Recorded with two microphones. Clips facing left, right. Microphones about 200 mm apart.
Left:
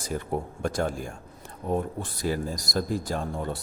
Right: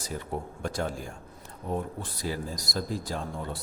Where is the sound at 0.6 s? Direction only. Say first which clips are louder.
Left 3 dB; 50° left (ahead or behind).